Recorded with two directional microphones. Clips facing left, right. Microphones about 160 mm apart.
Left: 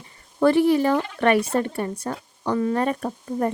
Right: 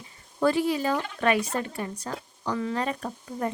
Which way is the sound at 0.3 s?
65° left (ahead or behind).